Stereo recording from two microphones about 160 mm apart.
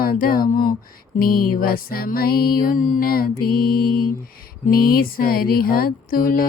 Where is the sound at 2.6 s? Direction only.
60° left (ahead or behind).